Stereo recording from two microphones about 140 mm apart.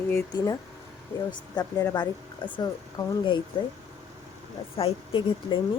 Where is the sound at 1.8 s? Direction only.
25° left (ahead or behind).